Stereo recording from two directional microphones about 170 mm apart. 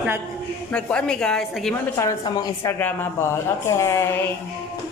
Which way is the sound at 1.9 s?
20° left (ahead or behind).